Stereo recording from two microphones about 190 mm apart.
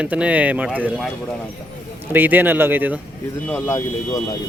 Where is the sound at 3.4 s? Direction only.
10° left (ahead or behind).